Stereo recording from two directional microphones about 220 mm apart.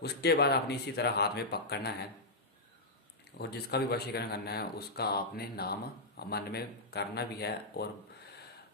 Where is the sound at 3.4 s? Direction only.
50° left (ahead or behind).